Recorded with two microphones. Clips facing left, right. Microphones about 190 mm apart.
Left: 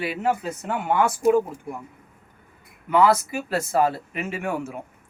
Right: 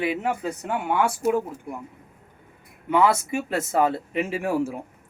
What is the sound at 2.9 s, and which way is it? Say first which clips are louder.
A man's voice: left 1 dB; 25° right (ahead or behind).